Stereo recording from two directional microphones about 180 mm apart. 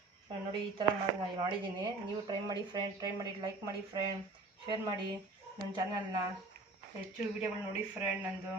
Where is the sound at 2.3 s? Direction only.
20° right (ahead or behind).